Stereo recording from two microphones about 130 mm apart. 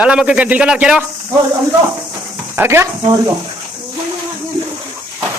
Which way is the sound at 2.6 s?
15° right (ahead or behind).